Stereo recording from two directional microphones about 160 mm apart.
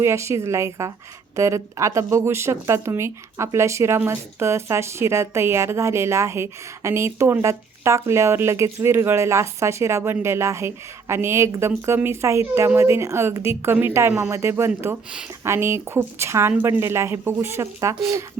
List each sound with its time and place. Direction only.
0.0 s speech: 15° right (ahead or behind)